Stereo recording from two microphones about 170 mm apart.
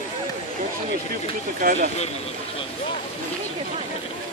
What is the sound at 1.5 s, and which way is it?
Speech, 55° right (ahead or behind).